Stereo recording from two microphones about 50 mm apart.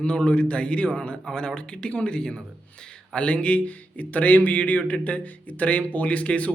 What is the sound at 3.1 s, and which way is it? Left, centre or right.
Speech, left.